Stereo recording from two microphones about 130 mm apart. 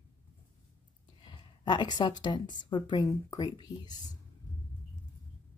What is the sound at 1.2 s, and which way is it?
Speech, 35° left (ahead or behind).